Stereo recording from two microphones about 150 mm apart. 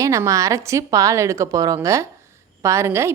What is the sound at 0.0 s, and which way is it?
A woman's voice, 20° right (ahead or behind).